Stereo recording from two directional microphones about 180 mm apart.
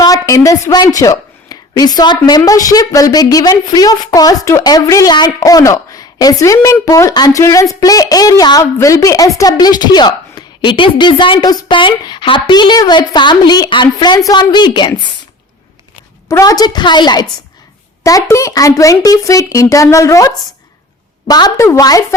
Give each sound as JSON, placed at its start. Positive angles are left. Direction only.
{"t": 0.0, "sound": "speech", "side_deg": 20}
{"t": 16.3, "sound": "speech", "side_deg": 20}